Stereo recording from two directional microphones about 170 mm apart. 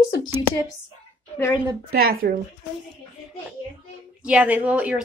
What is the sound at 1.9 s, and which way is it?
Speech, 60° right (ahead or behind).